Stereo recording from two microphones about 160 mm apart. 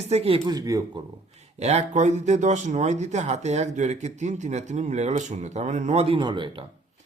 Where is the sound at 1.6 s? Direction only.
40° right (ahead or behind).